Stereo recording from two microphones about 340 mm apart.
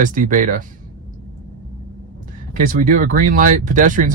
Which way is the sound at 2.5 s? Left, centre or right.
Right.